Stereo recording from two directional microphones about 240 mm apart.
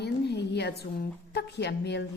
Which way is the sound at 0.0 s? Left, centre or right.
Left.